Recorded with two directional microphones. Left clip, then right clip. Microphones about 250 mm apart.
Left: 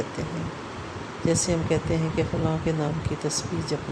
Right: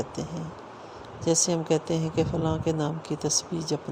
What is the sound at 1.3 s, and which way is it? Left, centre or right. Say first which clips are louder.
Speech: right 1 dB; right.